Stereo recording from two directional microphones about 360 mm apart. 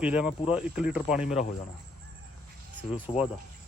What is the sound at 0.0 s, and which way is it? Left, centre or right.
Speech, centre.